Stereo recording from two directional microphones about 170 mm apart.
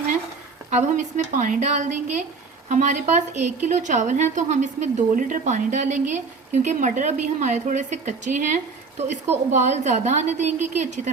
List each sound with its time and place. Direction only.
0.7 s a woman's voice: 45° right (ahead or behind)